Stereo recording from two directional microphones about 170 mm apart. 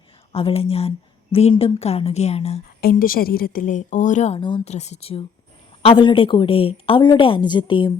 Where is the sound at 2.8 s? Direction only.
55° left (ahead or behind).